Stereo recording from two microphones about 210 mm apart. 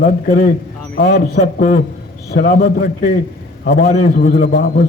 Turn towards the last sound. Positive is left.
turn(degrees=45)  # may be behind; listen again after turning